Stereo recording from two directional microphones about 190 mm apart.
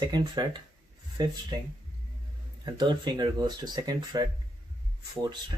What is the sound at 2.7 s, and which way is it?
Speech, 25° right (ahead or behind).